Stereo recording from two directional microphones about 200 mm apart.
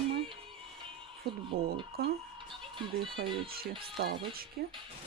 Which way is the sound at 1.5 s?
50° right (ahead or behind).